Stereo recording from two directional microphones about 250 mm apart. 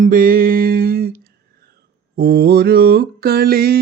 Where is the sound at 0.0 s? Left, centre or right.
Right.